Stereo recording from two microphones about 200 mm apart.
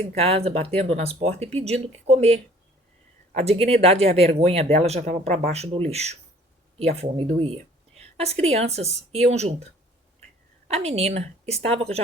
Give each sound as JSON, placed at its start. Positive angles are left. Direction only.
{"t": 0.0, "sound": "speech", "side_deg": -30}
{"t": 10.7, "sound": "speech", "side_deg": -30}